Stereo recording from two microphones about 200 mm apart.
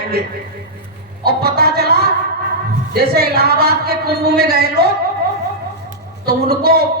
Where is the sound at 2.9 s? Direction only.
50° right (ahead or behind).